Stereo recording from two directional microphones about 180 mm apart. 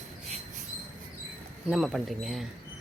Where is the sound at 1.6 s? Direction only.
Centre (ahead or behind).